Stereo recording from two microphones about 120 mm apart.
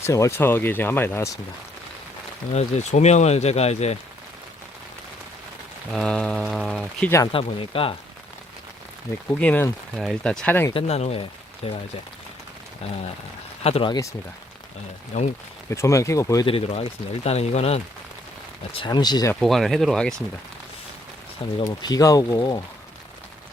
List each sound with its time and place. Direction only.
0.0 s speech: 25° left (ahead or behind)
2.5 s speech: 70° left (ahead or behind)
5.9 s speech: 5° left (ahead or behind)
7.3 s speech: 50° left (ahead or behind)
9.4 s speech: 10° left (ahead or behind)
10.8 s speech: 60° left (ahead or behind)
13.7 s speech: 55° left (ahead or behind)
15.1 s speech: 75° left (ahead or behind)
15.7 s speech: 25° left (ahead or behind)
16.5 s speech: 55° left (ahead or behind)
18.8 s speech: 35° left (ahead or behind)
19.4 s speech: centre (ahead or behind)
21.6 s speech: 35° left (ahead or behind)